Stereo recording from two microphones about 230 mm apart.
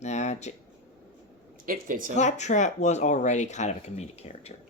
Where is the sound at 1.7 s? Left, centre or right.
Right.